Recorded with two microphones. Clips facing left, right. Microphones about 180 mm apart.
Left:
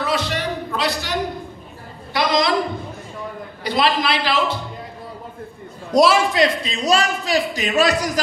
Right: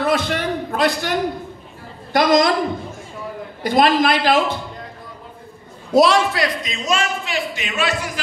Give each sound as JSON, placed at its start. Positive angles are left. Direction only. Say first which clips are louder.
{"t": 0.0, "sound": "a sound", "louder": "right 3 dB", "side_deg": -50}
{"t": 2.1, "sound": "a woman's voice", "louder": "right 4 dB", "side_deg": -45}
{"t": 3.6, "sound": "a man's voice", "louder": "right 4 dB", "side_deg": -50}
{"t": 5.9, "sound": "a man's voice", "louder": "right 1 dB", "side_deg": 5}
{"t": 6.3, "sound": "a man's voice", "louder": "left 4 dB", "side_deg": 25}